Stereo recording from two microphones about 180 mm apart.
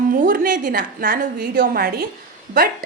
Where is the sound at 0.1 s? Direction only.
50° right (ahead or behind).